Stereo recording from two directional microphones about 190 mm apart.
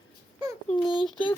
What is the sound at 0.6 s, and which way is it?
Speech, 25° left (ahead or behind).